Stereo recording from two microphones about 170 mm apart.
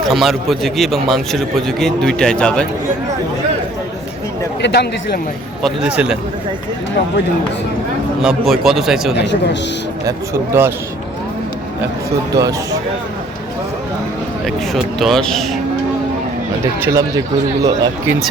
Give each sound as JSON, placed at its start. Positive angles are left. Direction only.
{"t": 0.1, "sound": "a man's voice", "side_deg": 0}
{"t": 4.6, "sound": "speech", "side_deg": 75}
{"t": 5.6, "sound": "a man's voice", "side_deg": -5}
{"t": 8.2, "sound": "a man's voice", "side_deg": 0}
{"t": 9.1, "sound": "speech", "side_deg": 90}
{"t": 10.1, "sound": "speech", "side_deg": -15}
{"t": 12.3, "sound": "speech", "side_deg": -20}
{"t": 14.4, "sound": "a man's voice", "side_deg": 0}
{"t": 16.8, "sound": "speech", "side_deg": -20}